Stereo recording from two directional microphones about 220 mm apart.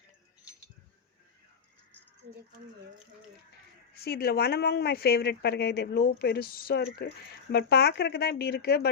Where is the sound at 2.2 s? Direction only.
40° right (ahead or behind).